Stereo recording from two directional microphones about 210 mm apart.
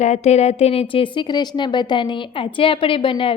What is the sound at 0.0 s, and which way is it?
A woman's voice, 30° left (ahead or behind).